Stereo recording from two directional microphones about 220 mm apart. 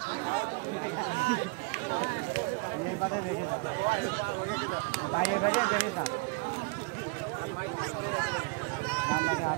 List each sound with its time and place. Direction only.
5.2 s speech: 35° left (ahead or behind)